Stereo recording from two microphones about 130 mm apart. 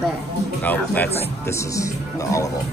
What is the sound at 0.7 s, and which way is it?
Speech, 15° left (ahead or behind).